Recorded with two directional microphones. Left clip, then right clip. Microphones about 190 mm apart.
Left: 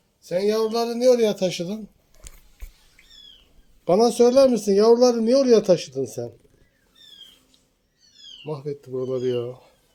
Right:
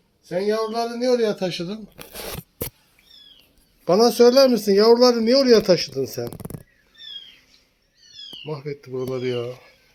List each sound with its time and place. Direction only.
0.3 s a man's voice: 30° left (ahead or behind)
3.8 s speech: 5° left (ahead or behind)
8.4 s speech: 10° left (ahead or behind)
8.9 s speech: 5° right (ahead or behind)